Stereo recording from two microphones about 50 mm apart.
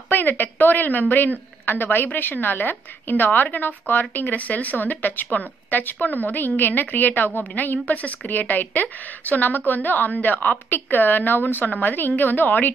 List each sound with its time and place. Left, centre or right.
0.1 s a woman's voice: left